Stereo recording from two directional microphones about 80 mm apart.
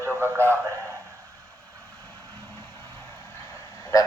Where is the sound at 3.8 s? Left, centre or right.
Left.